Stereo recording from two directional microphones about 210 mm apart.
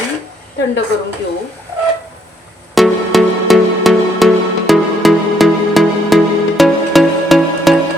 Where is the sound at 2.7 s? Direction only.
Centre (ahead or behind).